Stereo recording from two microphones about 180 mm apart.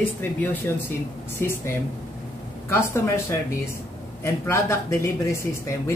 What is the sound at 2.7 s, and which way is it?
Speech, 15° left (ahead or behind).